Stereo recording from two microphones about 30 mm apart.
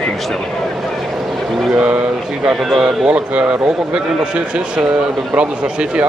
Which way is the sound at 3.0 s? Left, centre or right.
Right.